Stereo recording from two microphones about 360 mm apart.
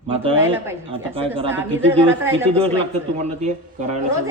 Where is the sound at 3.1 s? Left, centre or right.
Centre.